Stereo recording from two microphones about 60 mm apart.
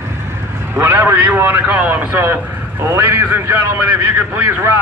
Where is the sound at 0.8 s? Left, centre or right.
Right.